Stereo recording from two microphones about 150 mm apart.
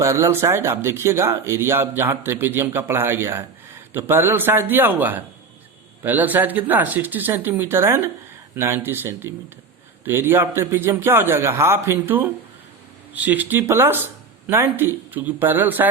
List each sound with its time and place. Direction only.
0.0 s speech: 20° right (ahead or behind)